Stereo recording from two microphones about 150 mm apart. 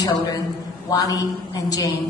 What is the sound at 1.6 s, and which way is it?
Speech, 25° left (ahead or behind).